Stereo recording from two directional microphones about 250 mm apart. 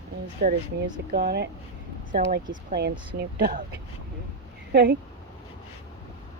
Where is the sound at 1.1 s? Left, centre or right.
Right.